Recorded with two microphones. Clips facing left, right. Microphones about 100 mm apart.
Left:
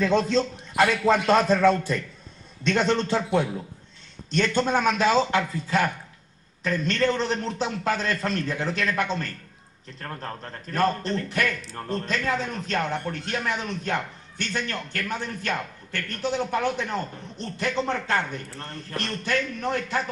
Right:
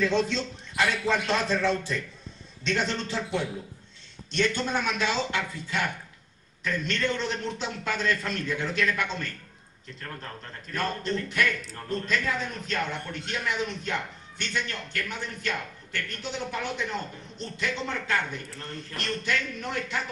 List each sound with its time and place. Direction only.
0.0 s a man's voice: 40° left (ahead or behind)